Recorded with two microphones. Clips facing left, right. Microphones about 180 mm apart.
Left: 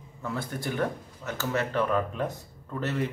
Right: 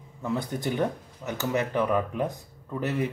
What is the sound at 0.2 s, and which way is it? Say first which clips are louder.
Speech: right 4 dB; 20° right (ahead or behind).